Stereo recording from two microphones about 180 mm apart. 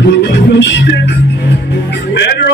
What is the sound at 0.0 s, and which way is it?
Music, 70° left (ahead or behind).